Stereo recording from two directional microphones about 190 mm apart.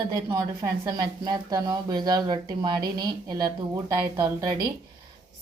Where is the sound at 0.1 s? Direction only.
15° right (ahead or behind).